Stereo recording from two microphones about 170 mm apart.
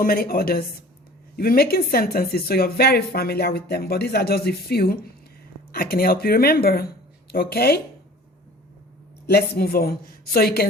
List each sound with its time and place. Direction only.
0.0 s speech: 60° left (ahead or behind)
9.2 s speech: 65° left (ahead or behind)